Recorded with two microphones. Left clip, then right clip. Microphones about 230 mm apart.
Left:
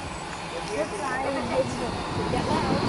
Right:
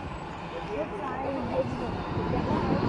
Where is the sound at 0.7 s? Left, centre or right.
Centre.